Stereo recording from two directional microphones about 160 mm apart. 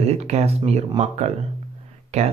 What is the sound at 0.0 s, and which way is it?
Speech, 40° right (ahead or behind).